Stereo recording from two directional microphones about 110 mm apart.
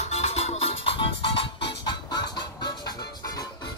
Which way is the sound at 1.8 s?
40° left (ahead or behind).